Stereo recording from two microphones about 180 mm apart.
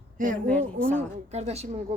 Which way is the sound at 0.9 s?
40° right (ahead or behind).